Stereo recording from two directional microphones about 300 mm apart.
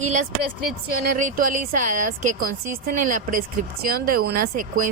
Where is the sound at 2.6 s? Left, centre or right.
Right.